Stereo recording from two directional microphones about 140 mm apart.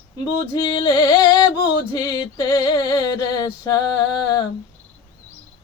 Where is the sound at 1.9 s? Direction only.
30° left (ahead or behind).